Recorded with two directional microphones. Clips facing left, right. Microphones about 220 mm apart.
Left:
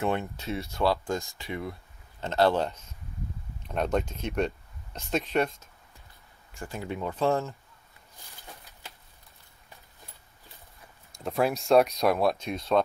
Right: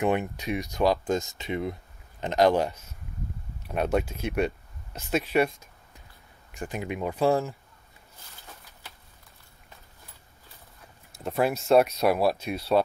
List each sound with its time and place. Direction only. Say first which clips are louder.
0.0 s speech: right 3 dB; 15° right (ahead or behind)
11.1 s speech: right 1 dB; 5° right (ahead or behind)